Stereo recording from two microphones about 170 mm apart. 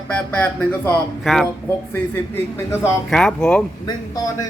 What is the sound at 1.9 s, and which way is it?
Speech, 15° left (ahead or behind).